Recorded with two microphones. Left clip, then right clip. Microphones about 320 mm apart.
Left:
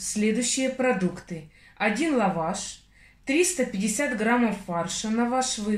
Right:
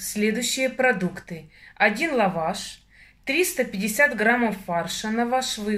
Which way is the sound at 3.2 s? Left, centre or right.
Right.